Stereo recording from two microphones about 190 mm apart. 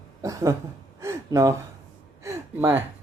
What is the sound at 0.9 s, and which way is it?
Gasp, 15° right (ahead or behind).